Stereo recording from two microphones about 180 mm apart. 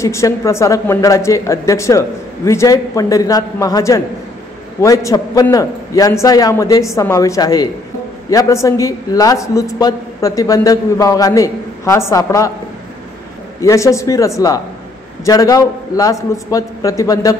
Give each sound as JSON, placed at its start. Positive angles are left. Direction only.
{"t": 0.0, "sound": "a woman's voice", "side_deg": 15}
{"t": 13.6, "sound": "a woman's voice", "side_deg": 15}